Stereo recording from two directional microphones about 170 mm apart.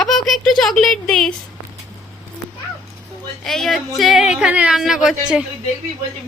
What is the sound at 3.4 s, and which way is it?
A woman's voice, centre (ahead or behind).